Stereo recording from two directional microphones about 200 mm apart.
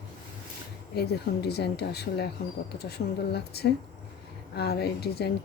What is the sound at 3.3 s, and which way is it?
Speech, 55° left (ahead or behind).